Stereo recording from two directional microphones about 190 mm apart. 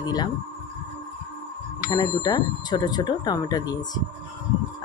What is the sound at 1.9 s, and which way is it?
Speech, 20° left (ahead or behind).